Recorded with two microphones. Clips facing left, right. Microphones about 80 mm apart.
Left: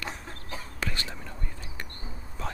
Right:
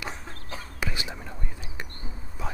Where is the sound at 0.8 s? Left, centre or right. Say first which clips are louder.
Right 2 dB; centre.